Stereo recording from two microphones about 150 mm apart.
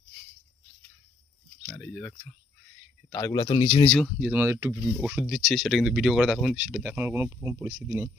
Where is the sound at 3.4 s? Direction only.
35° left (ahead or behind).